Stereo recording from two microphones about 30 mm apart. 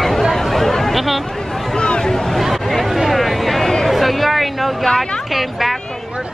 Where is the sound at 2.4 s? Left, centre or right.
Centre.